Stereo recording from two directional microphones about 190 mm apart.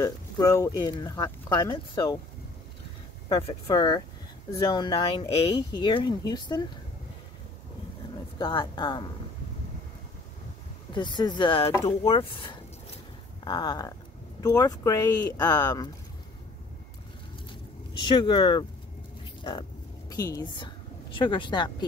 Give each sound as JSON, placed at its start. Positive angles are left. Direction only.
{"t": 0.0, "sound": "speech", "side_deg": 15}
{"t": 3.3, "sound": "speech", "side_deg": 25}
{"t": 8.4, "sound": "speech", "side_deg": 25}
{"t": 10.9, "sound": "speech", "side_deg": 25}
{"t": 18.0, "sound": "speech", "side_deg": 25}
{"t": 20.1, "sound": "a woman's voice", "side_deg": 20}